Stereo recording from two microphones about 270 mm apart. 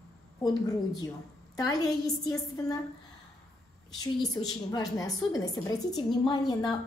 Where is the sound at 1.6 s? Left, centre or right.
Centre.